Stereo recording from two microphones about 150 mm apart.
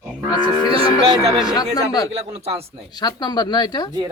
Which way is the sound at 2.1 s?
40° right (ahead or behind).